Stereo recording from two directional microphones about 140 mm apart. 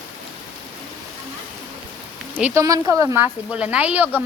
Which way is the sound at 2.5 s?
25° right (ahead or behind).